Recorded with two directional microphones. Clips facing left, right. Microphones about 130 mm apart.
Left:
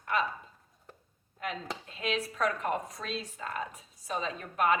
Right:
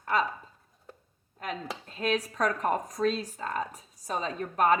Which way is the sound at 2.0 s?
40° right (ahead or behind).